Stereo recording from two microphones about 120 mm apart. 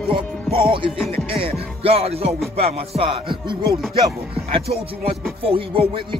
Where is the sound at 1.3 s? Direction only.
55° right (ahead or behind).